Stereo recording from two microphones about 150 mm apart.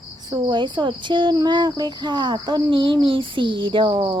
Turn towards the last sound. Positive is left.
turn(degrees=-30)  # may be behind; listen again after turning